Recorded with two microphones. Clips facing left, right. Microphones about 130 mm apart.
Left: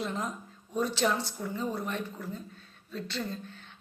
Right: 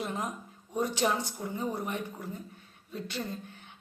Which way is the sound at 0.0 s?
15° right (ahead or behind).